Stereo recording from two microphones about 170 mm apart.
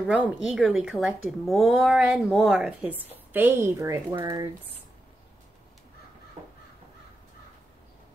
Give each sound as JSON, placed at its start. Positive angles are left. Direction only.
{"t": 0.0, "sound": "speech", "side_deg": -5}